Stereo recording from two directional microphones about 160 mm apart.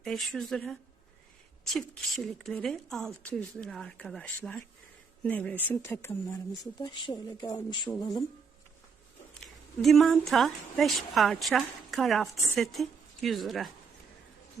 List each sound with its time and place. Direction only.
0.0 s a woman's voice: centre (ahead or behind)
6.8 s speech: 30° left (ahead or behind)
9.4 s a woman's voice: centre (ahead or behind)